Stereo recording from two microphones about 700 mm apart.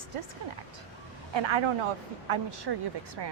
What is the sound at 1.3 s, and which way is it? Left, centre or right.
A woman's voice, right.